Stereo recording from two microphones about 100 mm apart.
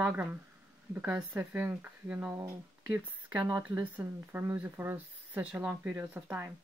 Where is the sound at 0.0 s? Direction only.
15° right (ahead or behind).